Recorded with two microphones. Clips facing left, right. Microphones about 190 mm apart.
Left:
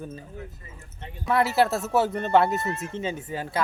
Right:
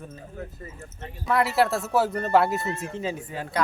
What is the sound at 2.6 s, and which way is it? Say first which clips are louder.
Speech: even; 20° left (ahead or behind).